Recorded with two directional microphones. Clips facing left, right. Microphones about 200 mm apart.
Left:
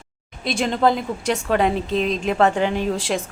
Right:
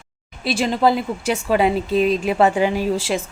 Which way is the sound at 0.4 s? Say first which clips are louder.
Right 1 dB; 5° right (ahead or behind).